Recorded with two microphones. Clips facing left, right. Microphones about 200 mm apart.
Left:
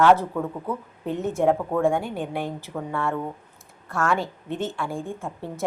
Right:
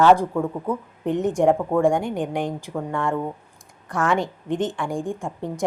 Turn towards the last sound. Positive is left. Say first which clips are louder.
# right 4 dB
turn(degrees=-15)  # may be behind; listen again after turning